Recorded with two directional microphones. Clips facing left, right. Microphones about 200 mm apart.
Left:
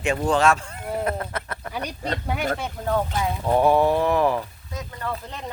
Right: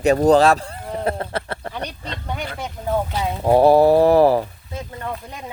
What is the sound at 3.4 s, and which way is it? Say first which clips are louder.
Speech: right 6 dB; 35° right (ahead or behind).